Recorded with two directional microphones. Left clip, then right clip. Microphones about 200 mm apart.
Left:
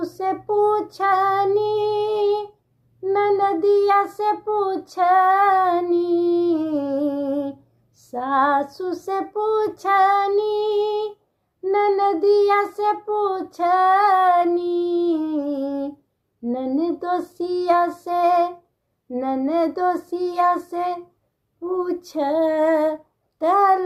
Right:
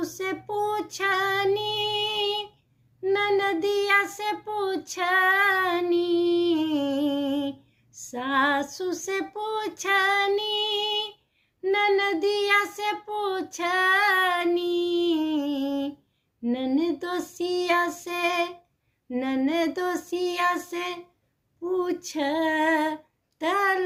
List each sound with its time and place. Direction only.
0.0 s female singing: 50° right (ahead or behind)
3.0 s child singing: 50° right (ahead or behind)